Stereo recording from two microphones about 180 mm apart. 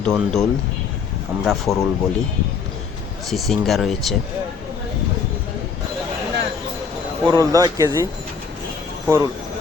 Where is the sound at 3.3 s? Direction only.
Centre (ahead or behind).